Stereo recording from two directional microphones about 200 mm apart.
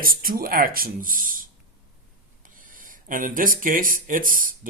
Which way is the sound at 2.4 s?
40° right (ahead or behind).